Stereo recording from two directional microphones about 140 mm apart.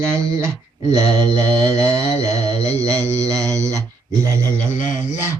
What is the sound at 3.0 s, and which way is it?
Mantra, 20° right (ahead or behind).